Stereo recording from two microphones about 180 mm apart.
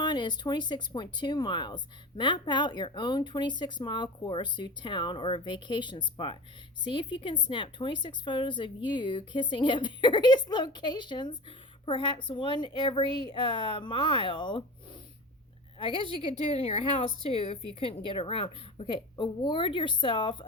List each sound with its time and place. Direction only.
0.0 s a woman's voice: 25° left (ahead or behind)
15.8 s a woman's voice: 30° left (ahead or behind)